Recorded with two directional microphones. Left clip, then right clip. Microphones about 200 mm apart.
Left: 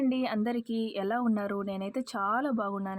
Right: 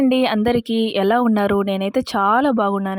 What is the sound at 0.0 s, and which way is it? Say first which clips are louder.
Speech: right 13 dB; 55° right (ahead or behind).